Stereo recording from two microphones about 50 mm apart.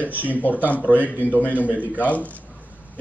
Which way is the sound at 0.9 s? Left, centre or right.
Left.